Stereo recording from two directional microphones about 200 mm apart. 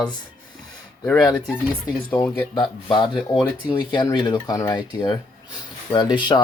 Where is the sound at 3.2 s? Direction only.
5° right (ahead or behind).